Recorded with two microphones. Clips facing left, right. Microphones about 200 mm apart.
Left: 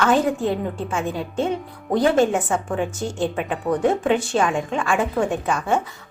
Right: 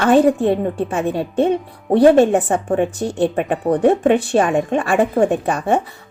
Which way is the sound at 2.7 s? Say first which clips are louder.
Right 6 dB; 60° right (ahead or behind).